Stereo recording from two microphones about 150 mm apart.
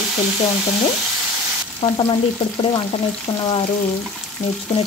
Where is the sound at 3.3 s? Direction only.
25° left (ahead or behind).